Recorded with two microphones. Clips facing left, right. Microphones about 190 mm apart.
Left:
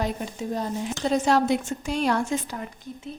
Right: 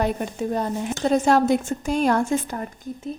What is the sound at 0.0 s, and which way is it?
A woman's voice, 55° right (ahead or behind).